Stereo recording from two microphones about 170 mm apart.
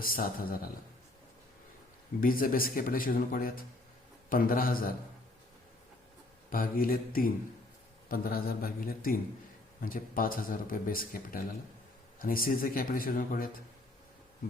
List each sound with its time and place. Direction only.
0.0 s speech: 55° left (ahead or behind)
2.2 s speech: 55° left (ahead or behind)
6.5 s speech: 55° left (ahead or behind)